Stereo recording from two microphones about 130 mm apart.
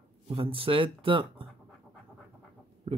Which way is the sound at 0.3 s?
45° right (ahead or behind).